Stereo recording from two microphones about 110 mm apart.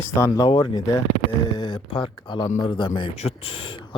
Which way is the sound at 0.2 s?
40° left (ahead or behind).